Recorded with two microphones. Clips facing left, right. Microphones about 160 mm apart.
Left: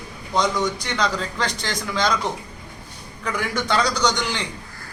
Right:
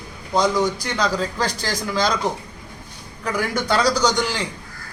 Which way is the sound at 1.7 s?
5° right (ahead or behind).